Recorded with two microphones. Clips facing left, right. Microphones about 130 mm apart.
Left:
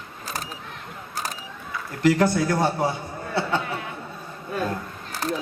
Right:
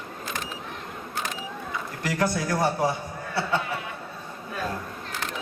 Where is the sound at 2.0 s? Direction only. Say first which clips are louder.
Left 7 dB; 25° left (ahead or behind).